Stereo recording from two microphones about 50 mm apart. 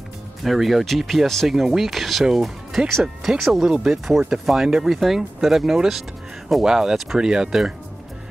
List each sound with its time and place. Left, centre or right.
0.4 s speech: centre
1.5 s speech: centre